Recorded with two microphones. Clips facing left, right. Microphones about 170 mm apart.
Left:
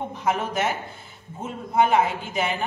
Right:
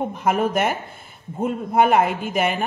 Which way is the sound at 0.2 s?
55° right (ahead or behind).